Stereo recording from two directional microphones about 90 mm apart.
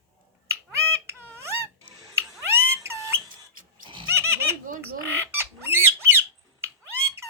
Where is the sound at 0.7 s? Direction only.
30° right (ahead or behind).